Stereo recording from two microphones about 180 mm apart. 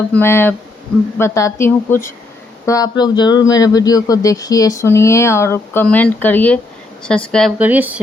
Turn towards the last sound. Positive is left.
turn(degrees=-10)  # may be behind; listen again after turning